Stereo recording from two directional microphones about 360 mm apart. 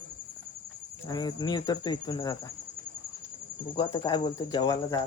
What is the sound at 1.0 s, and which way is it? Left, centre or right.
Speech, centre.